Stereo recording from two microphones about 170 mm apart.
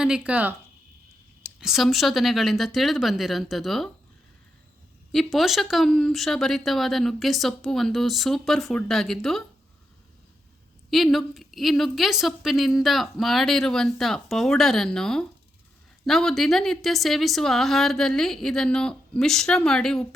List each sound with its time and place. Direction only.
0.0 s speech: 5° right (ahead or behind)
1.5 s a woman's voice: centre (ahead or behind)
5.1 s a woman's voice: centre (ahead or behind)
10.9 s a woman's voice: centre (ahead or behind)